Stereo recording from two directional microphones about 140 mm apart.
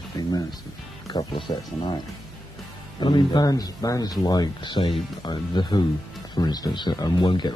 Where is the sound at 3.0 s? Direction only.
30° left (ahead or behind).